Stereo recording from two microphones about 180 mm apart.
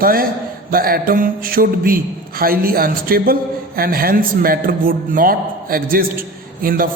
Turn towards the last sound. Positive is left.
turn(degrees=-55)  # may be behind; listen again after turning